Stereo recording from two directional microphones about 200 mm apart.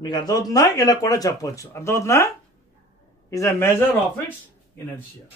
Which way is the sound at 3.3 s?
15° left (ahead or behind).